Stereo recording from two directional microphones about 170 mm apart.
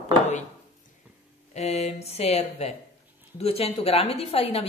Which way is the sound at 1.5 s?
40° left (ahead or behind).